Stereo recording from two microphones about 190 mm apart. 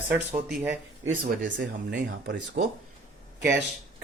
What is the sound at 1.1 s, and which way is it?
Speech, 45° right (ahead or behind).